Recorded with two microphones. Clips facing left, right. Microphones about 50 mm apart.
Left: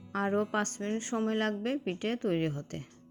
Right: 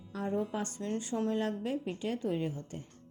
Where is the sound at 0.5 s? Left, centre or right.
Left.